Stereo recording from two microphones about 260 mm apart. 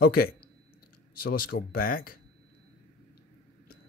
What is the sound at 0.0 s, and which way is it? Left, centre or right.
Speech, left.